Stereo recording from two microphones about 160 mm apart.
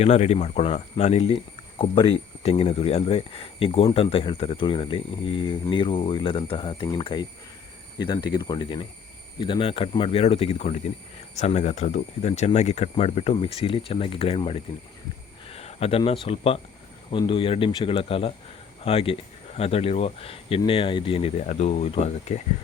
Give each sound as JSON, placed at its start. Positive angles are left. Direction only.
{"t": 0.0, "sound": "speech", "side_deg": 45}
{"t": 15.4, "sound": "a sound", "side_deg": 40}
{"t": 16.2, "sound": "speech", "side_deg": 35}